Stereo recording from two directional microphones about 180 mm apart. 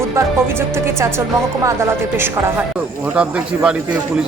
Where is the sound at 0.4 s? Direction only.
15° right (ahead or behind).